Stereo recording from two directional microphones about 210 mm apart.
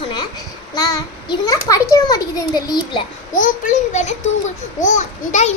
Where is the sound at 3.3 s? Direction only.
40° left (ahead or behind).